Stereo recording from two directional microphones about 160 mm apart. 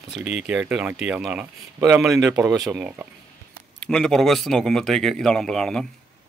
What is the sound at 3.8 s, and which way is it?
Speech, 5° left (ahead or behind).